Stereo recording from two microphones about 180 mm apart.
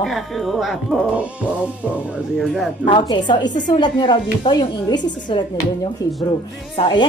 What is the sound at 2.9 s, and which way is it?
A woman's voice, 25° left (ahead or behind).